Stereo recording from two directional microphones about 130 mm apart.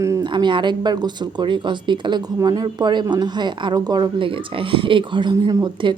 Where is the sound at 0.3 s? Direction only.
35° right (ahead or behind).